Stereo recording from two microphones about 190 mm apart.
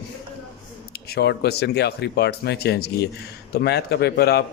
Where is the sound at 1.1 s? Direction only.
55° left (ahead or behind).